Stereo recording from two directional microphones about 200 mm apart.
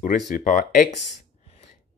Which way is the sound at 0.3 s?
40° left (ahead or behind).